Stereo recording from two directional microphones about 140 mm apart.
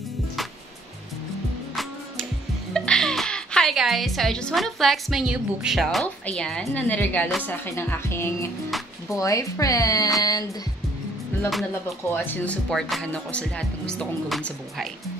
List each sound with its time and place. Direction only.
2.7 s a woman's voice: 5° left (ahead or behind); by 10.1 s 25° left (ahead or behind)
12.1 s speech: 10° left (ahead or behind)